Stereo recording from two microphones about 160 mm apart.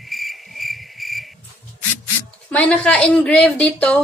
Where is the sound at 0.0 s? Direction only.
Centre (ahead or behind).